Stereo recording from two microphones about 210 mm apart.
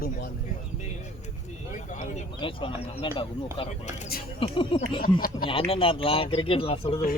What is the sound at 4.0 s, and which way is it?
Speech, 45° left (ahead or behind).